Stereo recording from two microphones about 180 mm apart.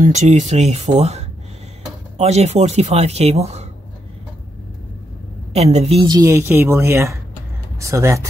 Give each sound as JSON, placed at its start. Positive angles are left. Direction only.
{"t": 0.0, "sound": "speech", "side_deg": -40}
{"t": 5.5, "sound": "speech", "side_deg": -35}
{"t": 6.0, "sound": "speech", "side_deg": -20}